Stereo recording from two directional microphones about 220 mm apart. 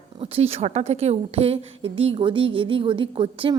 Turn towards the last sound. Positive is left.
turn(degrees=-25)  # may be behind; listen again after turning